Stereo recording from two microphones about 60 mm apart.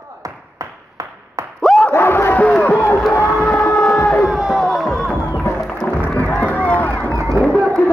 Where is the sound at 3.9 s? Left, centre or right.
Left.